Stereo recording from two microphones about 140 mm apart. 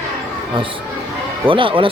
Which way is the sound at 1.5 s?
40° right (ahead or behind).